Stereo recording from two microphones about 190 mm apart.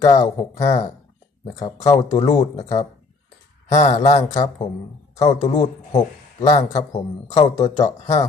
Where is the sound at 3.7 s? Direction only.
35° left (ahead or behind).